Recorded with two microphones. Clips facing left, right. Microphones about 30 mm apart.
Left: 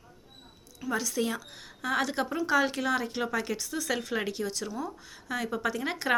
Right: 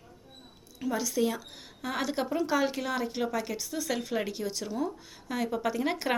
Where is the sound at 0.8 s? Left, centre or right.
Right.